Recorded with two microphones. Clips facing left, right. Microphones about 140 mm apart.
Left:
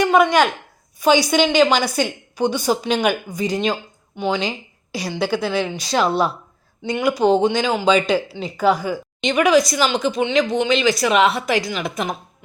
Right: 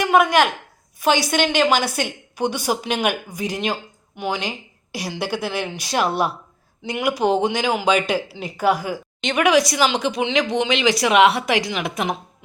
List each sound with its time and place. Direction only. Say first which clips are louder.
0.0 s a woman's voice: left 1 dB; 5° right (ahead or behind)